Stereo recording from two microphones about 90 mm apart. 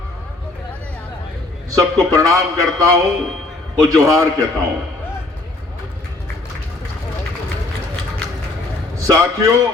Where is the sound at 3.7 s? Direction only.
35° right (ahead or behind).